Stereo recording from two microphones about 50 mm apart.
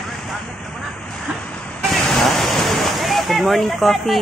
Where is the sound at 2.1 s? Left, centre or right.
Centre.